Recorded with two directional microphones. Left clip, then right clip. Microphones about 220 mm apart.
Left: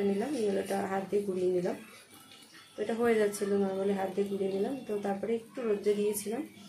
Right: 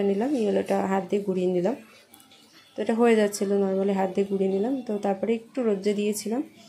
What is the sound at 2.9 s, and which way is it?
Speech, 40° right (ahead or behind).